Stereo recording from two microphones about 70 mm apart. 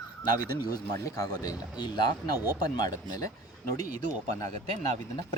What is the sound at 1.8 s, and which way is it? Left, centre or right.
Speech, left.